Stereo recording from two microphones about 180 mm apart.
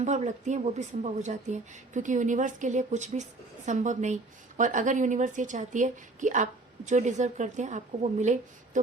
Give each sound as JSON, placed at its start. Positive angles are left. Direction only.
{"t": 0.0, "sound": "a woman's voice", "side_deg": -40}